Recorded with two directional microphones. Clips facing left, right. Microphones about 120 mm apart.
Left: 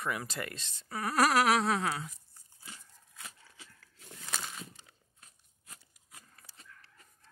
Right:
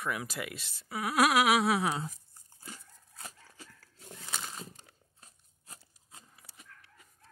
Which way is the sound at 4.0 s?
20° right (ahead or behind).